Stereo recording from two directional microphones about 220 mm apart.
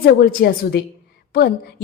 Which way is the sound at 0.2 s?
45° left (ahead or behind).